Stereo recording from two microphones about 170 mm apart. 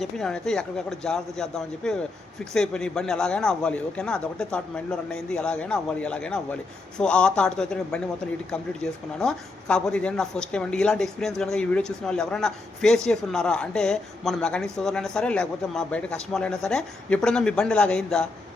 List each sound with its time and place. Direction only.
0.0 s a woman's voice: 5° left (ahead or behind)